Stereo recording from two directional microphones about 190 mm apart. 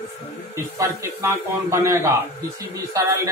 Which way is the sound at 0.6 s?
15° right (ahead or behind).